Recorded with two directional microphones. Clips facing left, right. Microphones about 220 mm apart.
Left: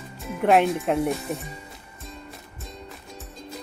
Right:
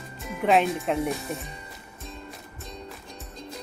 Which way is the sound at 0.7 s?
Centre (ahead or behind).